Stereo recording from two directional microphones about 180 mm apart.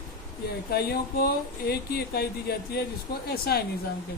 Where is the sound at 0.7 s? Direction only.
60° left (ahead or behind).